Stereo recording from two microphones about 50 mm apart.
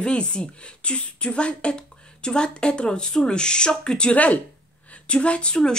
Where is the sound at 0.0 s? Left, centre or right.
Centre.